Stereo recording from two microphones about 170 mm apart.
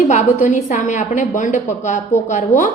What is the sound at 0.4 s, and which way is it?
A woman's voice, 50° left (ahead or behind).